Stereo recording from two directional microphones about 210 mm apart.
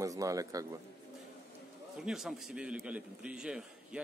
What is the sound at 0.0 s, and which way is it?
Speech, 15° right (ahead or behind).